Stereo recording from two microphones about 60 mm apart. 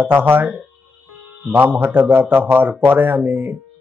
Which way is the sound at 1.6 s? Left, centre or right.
Right.